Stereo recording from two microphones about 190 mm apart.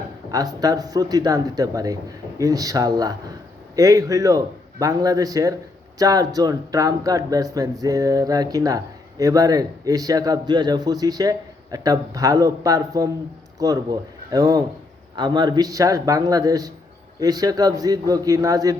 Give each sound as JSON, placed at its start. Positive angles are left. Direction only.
{"t": 0.3, "sound": "speech", "side_deg": -20}